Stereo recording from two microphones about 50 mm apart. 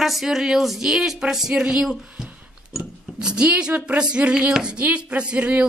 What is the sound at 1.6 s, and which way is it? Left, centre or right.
Speech, right.